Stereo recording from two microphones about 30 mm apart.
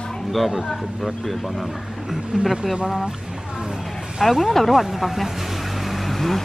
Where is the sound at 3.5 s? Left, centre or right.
Right.